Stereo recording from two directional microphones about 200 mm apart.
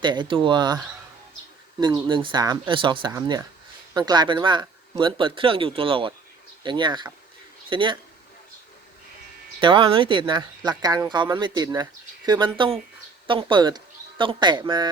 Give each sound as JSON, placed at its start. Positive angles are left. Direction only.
{"t": 0.0, "sound": "speech", "side_deg": -20}
{"t": 1.8, "sound": "speech", "side_deg": -25}
{"t": 9.6, "sound": "speech", "side_deg": -25}